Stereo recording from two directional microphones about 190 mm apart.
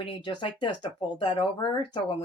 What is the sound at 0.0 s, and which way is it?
Speech, 25° left (ahead or behind).